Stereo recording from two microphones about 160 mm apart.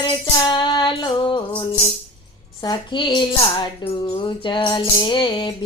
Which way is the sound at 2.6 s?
30° left (ahead or behind).